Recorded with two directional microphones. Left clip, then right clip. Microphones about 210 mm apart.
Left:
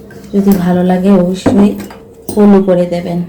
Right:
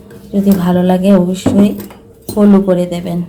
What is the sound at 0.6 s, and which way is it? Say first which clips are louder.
Speech: even; 30° right (ahead or behind).